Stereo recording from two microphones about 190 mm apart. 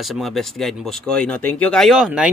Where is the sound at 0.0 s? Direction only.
Centre (ahead or behind).